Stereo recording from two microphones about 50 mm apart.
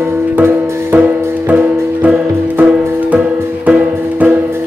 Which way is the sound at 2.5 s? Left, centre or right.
Right.